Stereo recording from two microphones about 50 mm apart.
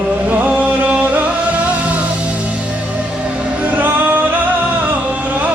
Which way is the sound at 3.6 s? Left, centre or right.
Right.